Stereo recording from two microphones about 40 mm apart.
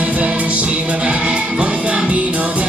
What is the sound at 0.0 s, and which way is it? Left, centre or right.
Music, right.